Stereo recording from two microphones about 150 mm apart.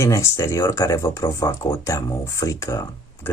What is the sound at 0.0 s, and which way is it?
Speech, 20° left (ahead or behind).